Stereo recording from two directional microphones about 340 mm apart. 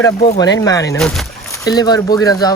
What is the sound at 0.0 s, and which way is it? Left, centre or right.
Speech, centre.